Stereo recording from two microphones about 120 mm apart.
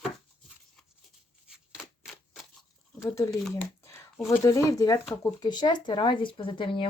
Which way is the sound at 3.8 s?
25° left (ahead or behind).